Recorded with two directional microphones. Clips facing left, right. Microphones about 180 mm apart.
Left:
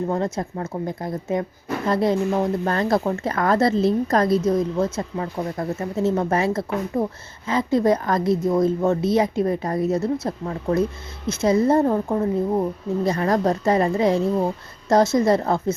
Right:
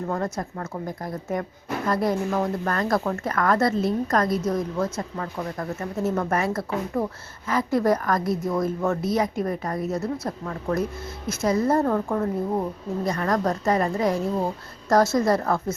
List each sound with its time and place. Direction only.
0.3 s speech: 25° left (ahead or behind)
13.1 s speech: 30° left (ahead or behind)